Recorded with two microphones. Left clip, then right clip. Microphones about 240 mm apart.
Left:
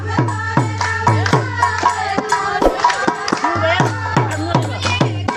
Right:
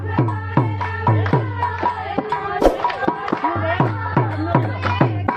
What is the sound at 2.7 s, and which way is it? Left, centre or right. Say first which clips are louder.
Music: right 1 dB; centre.